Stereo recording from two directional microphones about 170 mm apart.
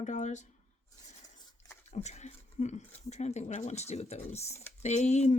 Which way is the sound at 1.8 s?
40° left (ahead or behind).